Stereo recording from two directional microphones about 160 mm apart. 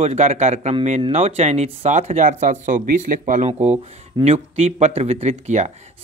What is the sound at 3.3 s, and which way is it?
A man's voice, 45° right (ahead or behind).